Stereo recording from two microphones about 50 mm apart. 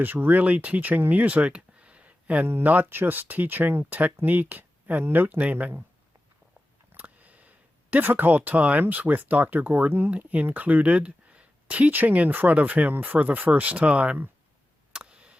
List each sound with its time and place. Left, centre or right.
0.0 s speech: right
2.4 s speech: right
2.6 s speech: right
2.9 s speech: right
6.9 s a sound: right
8.8 s speech: right
11.9 s speech: right
14.9 s a sound: right